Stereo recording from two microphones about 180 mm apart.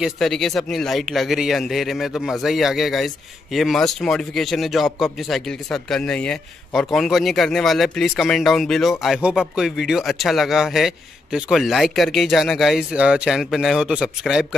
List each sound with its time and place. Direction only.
0.0 s a man's voice: centre (ahead or behind)